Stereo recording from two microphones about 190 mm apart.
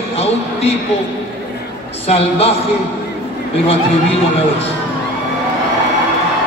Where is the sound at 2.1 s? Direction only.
30° left (ahead or behind).